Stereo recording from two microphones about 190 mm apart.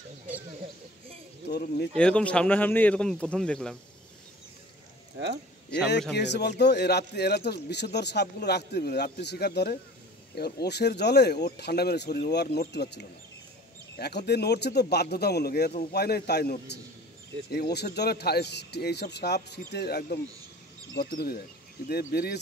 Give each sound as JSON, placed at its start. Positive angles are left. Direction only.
{"t": 1.5, "sound": "speech", "side_deg": 60}
{"t": 2.0, "sound": "speech", "side_deg": 5}
{"t": 6.1, "sound": "speech", "side_deg": 60}